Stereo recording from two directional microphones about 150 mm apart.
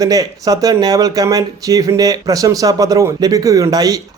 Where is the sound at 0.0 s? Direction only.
25° right (ahead or behind).